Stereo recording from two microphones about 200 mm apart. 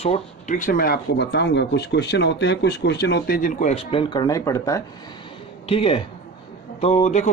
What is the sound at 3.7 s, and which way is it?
Speech, 30° left (ahead or behind).